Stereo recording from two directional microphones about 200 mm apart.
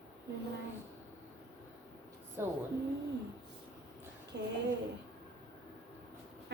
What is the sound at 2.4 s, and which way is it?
Speech, 10° right (ahead or behind).